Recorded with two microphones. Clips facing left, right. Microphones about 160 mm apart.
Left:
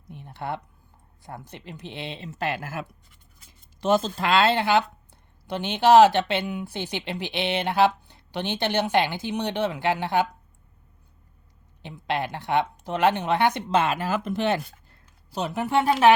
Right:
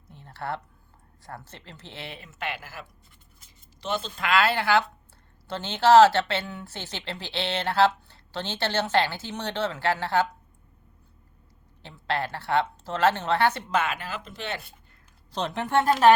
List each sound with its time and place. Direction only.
0.1 s a sound: 15° left (ahead or behind)
1.2 s speech: 15° left (ahead or behind); by 4.1 s 45° left (ahead or behind)
4.2 s speech: 25° left (ahead or behind)
11.8 s speech: 15° left (ahead or behind)
13.7 s speech: 30° left (ahead or behind); by 14.4 s 50° left (ahead or behind)
15.3 s speech: 5° left (ahead or behind)